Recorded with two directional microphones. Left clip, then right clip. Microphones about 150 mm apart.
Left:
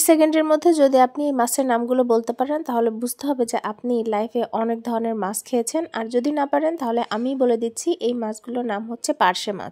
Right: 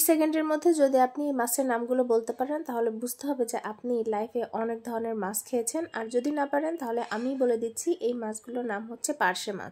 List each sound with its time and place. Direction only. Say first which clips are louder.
0.0 s a woman's voice: left 8 dB; 40° left (ahead or behind)